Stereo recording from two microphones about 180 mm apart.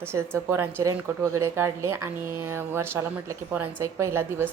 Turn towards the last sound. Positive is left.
turn(degrees=-15)  # may be behind; listen again after turning